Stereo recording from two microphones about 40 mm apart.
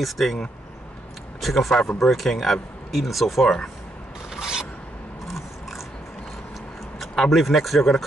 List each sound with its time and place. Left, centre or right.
0.0 s speech: centre
4.4 s mechanisms: centre
7.0 s speech: centre